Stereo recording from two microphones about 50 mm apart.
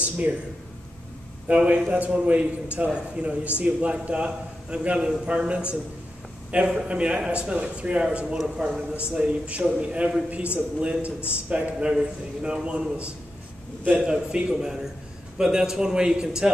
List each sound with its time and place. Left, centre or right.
1.5 s a man's voice: right
9.1 s a man's voice: right
11.1 s a man's voice: left
11.5 s a man's voice: right